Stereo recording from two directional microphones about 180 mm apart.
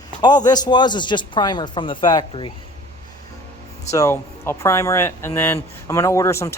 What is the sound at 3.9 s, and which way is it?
Speech, 15° left (ahead or behind).